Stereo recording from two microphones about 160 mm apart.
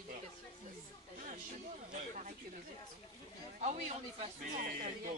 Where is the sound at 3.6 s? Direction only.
45° right (ahead or behind).